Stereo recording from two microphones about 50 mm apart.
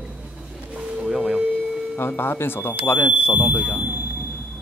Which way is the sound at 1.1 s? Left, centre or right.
Centre.